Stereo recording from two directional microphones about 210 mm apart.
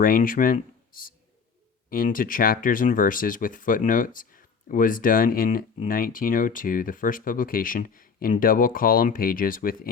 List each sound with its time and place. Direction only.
0.0 s speech: 40° left (ahead or behind)